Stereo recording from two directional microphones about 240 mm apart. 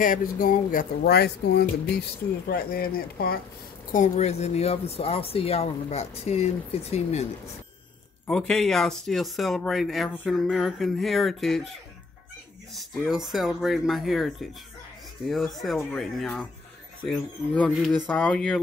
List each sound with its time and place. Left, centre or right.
0.0 s speech: left
8.3 s speech: centre
12.7 s speech: centre